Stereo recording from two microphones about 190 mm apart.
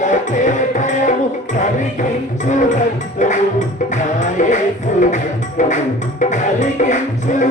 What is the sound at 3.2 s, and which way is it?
Music, 40° left (ahead or behind).